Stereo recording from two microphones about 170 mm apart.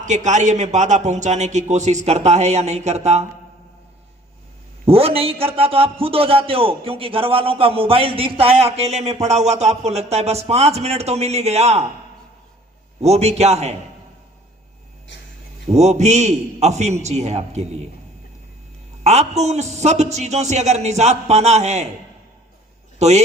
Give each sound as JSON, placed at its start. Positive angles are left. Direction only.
{"t": 0.0, "sound": "speech", "side_deg": -45}
{"t": 4.9, "sound": "a man's voice", "side_deg": -35}
{"t": 13.0, "sound": "a man's voice", "side_deg": -40}
{"t": 15.1, "sound": "a sound", "side_deg": 90}
{"t": 15.7, "sound": "a man's voice", "side_deg": -40}
{"t": 19.0, "sound": "a man's voice", "side_deg": -40}
{"t": 23.0, "sound": "a man's voice", "side_deg": -40}